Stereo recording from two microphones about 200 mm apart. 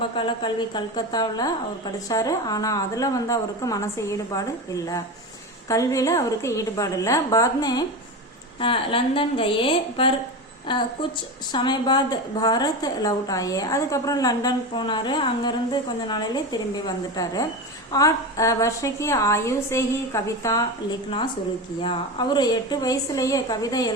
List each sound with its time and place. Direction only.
0.2 s a woman's voice: 25° left (ahead or behind)
21.8 s a woman's voice: 25° left (ahead or behind)